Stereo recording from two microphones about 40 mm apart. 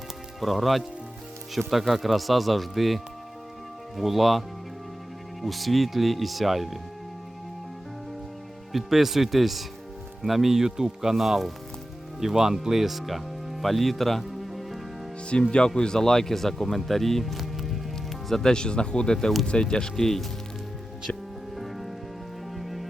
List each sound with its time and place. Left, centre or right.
0.3 s speech: centre
8.7 s speech: centre
15.5 s speech: left; by 17.4 s centre
17.4 s music: centre
18.4 s speech: centre
21.5 s rain on surface: centre
22.5 s music: centre